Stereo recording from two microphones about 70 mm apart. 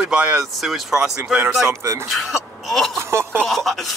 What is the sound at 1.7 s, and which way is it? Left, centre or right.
Speech, right.